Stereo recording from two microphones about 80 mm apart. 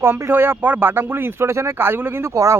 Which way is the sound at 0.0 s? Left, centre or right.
Right.